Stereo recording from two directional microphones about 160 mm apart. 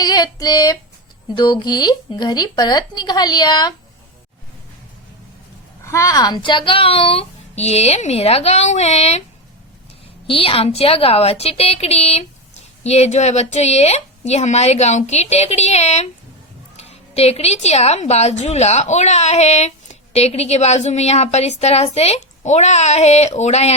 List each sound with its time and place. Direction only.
0.0 s female singing: 25° left (ahead or behind)
1.3 s speech: 30° left (ahead or behind)
5.8 s a woman's voice: 20° left (ahead or behind); by 9.2 s 40° left (ahead or behind)
10.2 s a woman's voice: 35° left (ahead or behind)